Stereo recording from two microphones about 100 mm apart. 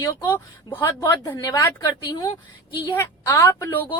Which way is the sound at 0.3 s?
20° left (ahead or behind).